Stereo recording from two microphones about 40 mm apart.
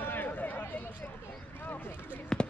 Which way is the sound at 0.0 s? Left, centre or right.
Left.